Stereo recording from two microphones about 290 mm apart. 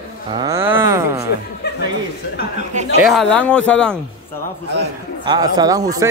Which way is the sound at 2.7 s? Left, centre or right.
Right.